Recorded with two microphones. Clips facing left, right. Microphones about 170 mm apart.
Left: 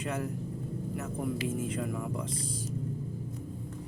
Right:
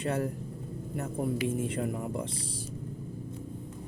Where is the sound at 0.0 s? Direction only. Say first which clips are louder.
Right 3 dB; 35° right (ahead or behind).